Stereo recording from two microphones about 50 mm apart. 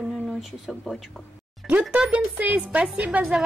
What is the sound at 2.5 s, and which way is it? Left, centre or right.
Speech, centre.